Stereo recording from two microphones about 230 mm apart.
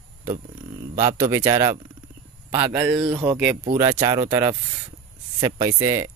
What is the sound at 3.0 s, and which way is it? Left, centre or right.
Speech, centre.